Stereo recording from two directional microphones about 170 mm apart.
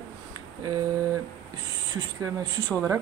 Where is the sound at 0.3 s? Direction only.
20° right (ahead or behind).